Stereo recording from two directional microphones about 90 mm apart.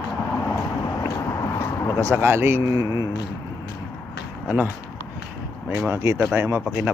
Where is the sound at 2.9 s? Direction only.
55° left (ahead or behind).